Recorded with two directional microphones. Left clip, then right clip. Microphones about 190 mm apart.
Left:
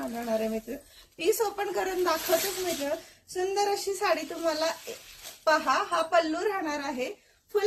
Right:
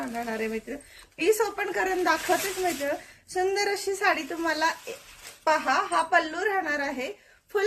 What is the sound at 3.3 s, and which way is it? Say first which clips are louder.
A woman's voice: right 2 dB; 20° right (ahead or behind).